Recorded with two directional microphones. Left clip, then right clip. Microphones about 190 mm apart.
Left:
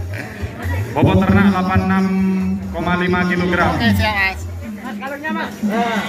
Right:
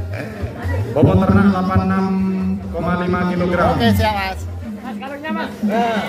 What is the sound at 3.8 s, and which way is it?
Speech, 55° right (ahead or behind).